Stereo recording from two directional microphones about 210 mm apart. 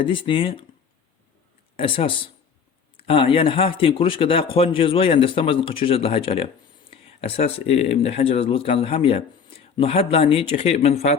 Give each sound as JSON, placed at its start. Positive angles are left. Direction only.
{"t": 0.0, "sound": "speech", "side_deg": 25}
{"t": 1.7, "sound": "speech", "side_deg": 25}